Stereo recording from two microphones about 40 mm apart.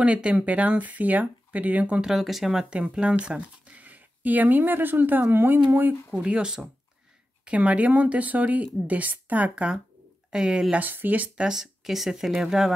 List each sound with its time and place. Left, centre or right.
0.0 s speech: right
2.0 s speech: centre
2.9 s speech: right
3.7 s speech: right
5.3 s speech: right
7.4 s speech: right
10.3 s speech: centre
10.8 s speech: right
11.3 s speech: centre